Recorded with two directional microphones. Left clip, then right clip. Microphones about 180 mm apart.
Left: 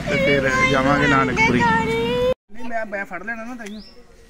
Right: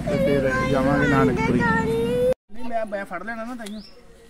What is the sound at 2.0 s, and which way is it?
Music, 40° right (ahead or behind).